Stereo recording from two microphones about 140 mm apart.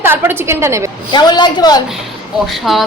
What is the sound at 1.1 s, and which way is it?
Speech, 30° left (ahead or behind).